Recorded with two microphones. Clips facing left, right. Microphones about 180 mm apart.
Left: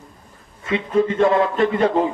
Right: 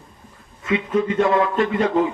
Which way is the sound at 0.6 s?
30° left (ahead or behind).